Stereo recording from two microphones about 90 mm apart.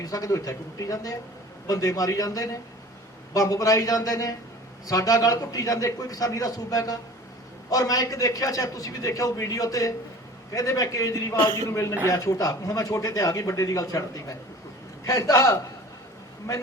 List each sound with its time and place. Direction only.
0.0 s speech: 40° left (ahead or behind)